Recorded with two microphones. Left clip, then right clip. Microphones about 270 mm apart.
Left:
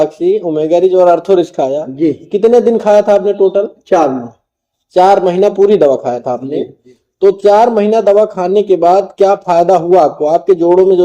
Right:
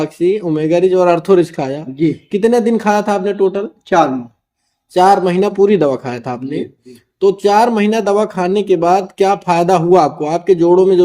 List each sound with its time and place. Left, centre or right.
0.0 s speech: right